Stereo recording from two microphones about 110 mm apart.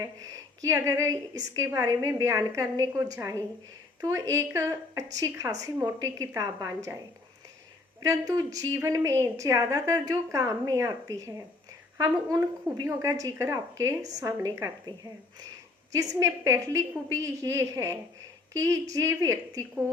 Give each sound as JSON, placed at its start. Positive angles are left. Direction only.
{"t": 0.0, "sound": "a woman's voice", "side_deg": -30}
{"t": 8.0, "sound": "a woman's voice", "side_deg": -35}